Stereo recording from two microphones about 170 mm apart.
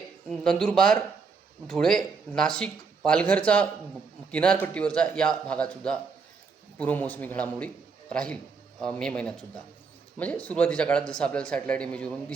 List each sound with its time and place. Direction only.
0.3 s a man's voice: 5° left (ahead or behind)